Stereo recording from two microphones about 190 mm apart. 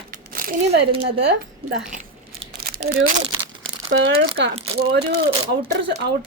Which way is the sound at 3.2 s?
30° right (ahead or behind).